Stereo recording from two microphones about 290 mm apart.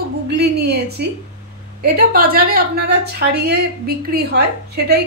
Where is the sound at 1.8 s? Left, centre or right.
Right.